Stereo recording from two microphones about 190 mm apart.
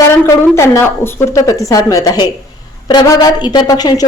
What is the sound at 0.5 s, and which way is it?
Speech, 15° left (ahead or behind).